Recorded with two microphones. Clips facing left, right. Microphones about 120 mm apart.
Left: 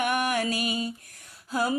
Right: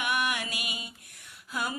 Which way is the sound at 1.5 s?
35° left (ahead or behind).